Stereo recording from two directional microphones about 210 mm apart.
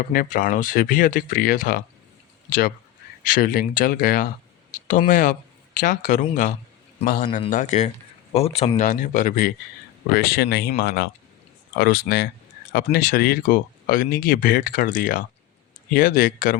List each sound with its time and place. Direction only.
0.0 s speech: 40° left (ahead or behind)
3.3 s speech: 40° left (ahead or behind)
7.3 s speech: 30° left (ahead or behind)